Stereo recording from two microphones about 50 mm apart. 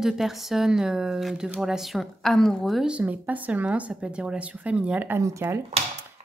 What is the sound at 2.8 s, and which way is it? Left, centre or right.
Speech, right.